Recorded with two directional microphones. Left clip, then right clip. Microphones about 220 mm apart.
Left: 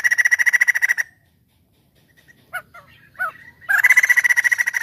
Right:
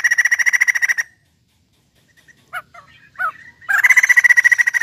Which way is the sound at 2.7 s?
45° left (ahead or behind).